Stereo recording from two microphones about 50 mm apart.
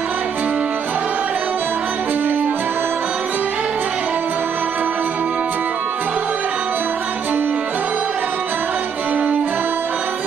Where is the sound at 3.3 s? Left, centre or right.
Right.